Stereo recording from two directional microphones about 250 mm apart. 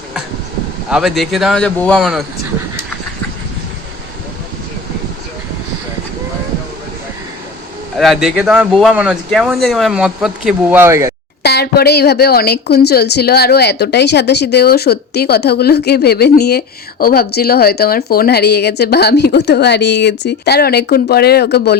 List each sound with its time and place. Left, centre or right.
0.9 s speech: centre
7.9 s speech: centre
11.4 s a woman's voice: left